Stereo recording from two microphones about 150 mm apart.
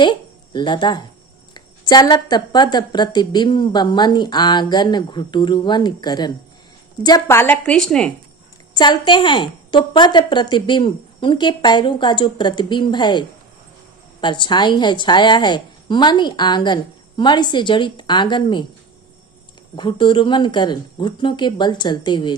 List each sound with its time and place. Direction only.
0.0 s a woman's voice: 30° left (ahead or behind)
7.3 s a woman's voice: 15° left (ahead or behind)
8.7 s a woman's voice: 30° left (ahead or behind)
19.7 s a woman's voice: 30° left (ahead or behind)